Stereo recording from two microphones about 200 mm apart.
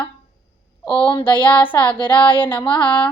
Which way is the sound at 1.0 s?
25° left (ahead or behind).